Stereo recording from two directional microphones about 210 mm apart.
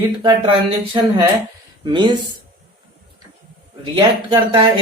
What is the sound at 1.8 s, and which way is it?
Speech, 20° right (ahead or behind).